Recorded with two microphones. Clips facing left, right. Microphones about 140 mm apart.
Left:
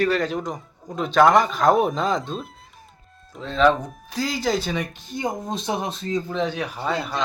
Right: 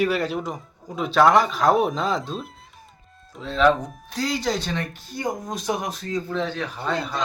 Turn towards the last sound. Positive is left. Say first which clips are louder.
# left 1 dB
turn(degrees=5)  # may be behind; listen again after turning